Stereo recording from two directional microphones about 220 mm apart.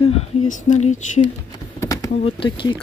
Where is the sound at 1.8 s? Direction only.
15° left (ahead or behind).